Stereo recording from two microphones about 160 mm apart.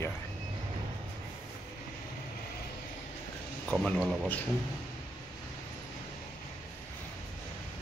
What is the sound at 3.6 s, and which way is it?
Speech, centre (ahead or behind).